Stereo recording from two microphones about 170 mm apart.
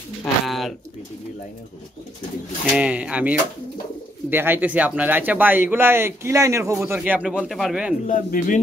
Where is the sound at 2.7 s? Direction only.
10° right (ahead or behind).